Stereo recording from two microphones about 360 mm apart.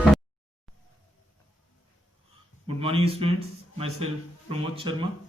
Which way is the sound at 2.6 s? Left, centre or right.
Centre.